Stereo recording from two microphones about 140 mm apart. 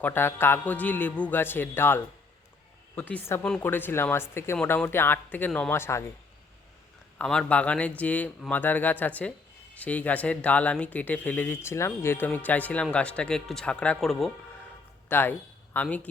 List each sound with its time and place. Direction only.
0.0 s speech: 15° left (ahead or behind)
7.2 s speech: 5° left (ahead or behind)
15.1 s speech: 15° left (ahead or behind)